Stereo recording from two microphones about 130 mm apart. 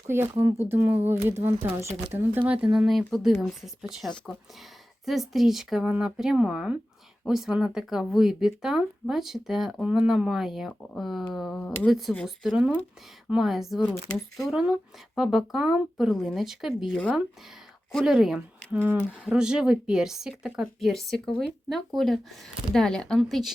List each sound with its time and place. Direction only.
0.1 s speech: 20° right (ahead or behind); by 13.8 s centre (ahead or behind)
15.1 s speech: centre (ahead or behind)